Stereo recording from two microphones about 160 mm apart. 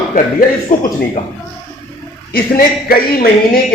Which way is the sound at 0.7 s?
55° left (ahead or behind).